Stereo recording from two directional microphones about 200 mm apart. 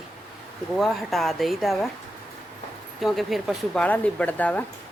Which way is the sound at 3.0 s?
Centre (ahead or behind).